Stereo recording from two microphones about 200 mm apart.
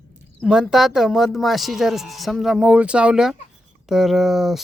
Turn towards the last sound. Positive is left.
turn(degrees=0)  # may be behind; listen again after turning